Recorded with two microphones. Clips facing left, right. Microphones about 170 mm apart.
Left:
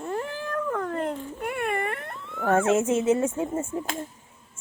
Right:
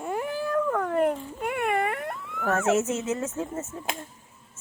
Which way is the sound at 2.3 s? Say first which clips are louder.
Left 5 dB; 25° left (ahead or behind).